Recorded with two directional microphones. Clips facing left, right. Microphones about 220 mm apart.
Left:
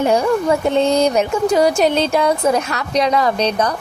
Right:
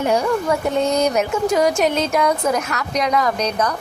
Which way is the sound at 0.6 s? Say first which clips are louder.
Left 3 dB; 30° left (ahead or behind).